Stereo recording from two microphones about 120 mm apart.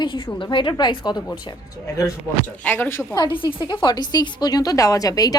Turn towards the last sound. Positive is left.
turn(degrees=30)  # may be behind; listen again after turning